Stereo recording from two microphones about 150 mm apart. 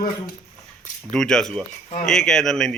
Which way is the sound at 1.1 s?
5° left (ahead or behind).